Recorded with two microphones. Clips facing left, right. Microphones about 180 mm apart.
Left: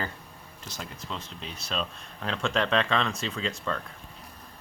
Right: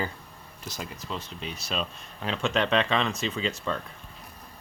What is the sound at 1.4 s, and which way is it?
Speech, 30° left (ahead or behind).